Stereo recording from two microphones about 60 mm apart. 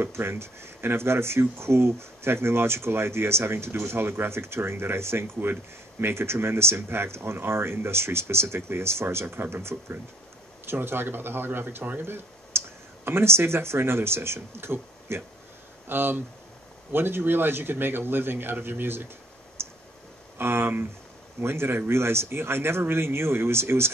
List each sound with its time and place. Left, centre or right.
0.0 s a man's voice: right
19.6 s clicking: right
20.3 s a man's voice: right